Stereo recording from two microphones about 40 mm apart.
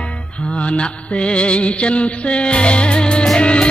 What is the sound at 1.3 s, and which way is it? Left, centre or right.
Music, left.